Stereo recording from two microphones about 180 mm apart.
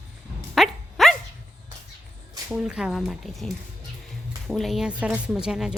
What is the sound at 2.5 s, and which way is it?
A woman's voice, 5° right (ahead or behind).